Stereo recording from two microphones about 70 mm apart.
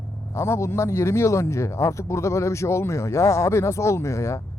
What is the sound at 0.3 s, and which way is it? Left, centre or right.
Speech, left.